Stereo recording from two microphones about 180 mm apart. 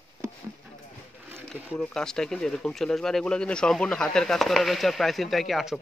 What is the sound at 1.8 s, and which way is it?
Speech, 5° left (ahead or behind).